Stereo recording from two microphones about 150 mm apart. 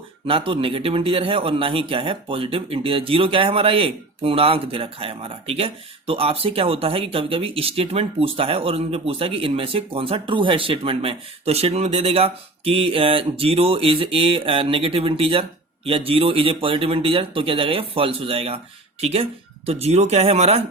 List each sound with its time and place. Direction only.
0.3 s a man's voice: 35° right (ahead or behind)